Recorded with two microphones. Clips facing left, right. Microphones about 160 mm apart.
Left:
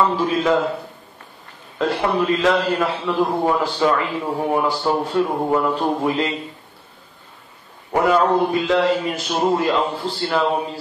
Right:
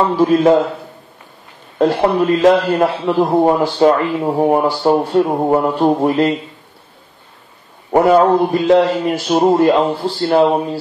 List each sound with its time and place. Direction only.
0.0 s a man's voice: 40° right (ahead or behind)
1.8 s a man's voice: 40° right (ahead or behind)
7.9 s a man's voice: 40° right (ahead or behind)